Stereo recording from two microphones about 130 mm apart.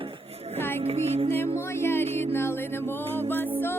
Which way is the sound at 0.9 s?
50° right (ahead or behind).